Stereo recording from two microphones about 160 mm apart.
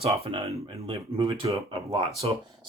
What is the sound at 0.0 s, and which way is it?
Speech, 40° right (ahead or behind).